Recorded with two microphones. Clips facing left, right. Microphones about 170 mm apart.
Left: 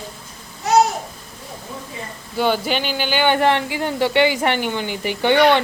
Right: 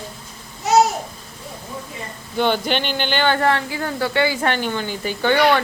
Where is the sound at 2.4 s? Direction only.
5° left (ahead or behind).